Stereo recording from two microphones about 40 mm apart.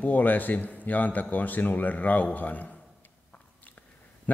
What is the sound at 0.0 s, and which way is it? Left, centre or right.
A man's voice, left.